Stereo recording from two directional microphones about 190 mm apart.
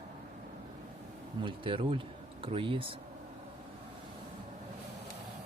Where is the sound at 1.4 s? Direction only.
25° right (ahead or behind).